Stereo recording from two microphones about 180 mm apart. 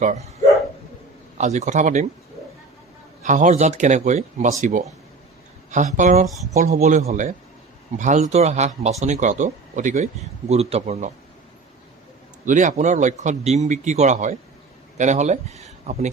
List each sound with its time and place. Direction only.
1.4 s a man's voice: 40° right (ahead or behind)
3.2 s a man's voice: 45° right (ahead or behind)
5.7 s a man's voice: 45° right (ahead or behind)
12.5 s a man's voice: 45° right (ahead or behind)